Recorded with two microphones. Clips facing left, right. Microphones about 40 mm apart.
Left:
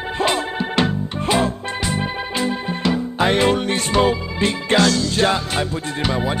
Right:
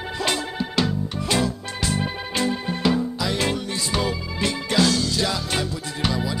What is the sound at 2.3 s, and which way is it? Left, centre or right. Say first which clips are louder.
Music: even; centre.